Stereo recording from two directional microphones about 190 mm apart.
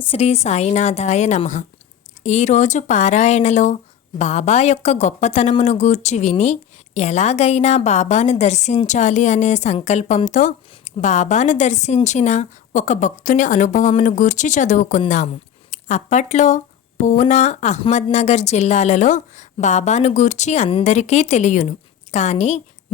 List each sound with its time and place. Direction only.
0.1 s a woman's voice: 35° left (ahead or behind)